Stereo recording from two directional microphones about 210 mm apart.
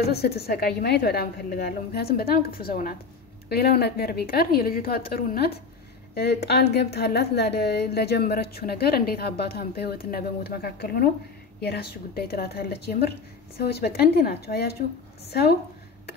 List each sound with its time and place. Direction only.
0.1 s a woman's voice: 50° left (ahead or behind)